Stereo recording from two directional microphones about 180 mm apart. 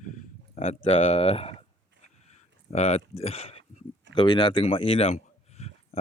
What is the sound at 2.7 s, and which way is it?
Speech, 35° left (ahead or behind).